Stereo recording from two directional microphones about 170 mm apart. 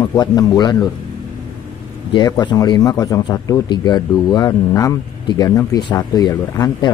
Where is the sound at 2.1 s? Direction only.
25° left (ahead or behind).